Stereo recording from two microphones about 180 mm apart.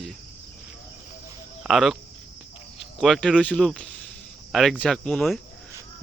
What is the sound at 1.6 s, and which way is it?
Speech, centre (ahead or behind).